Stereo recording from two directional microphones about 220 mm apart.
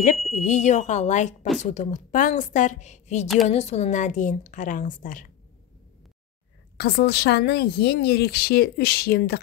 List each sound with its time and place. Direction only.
0.4 s a woman's voice: 30° left (ahead or behind)
6.8 s a woman's voice: 45° left (ahead or behind)